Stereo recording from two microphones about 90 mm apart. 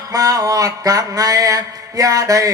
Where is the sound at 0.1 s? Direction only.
40° right (ahead or behind).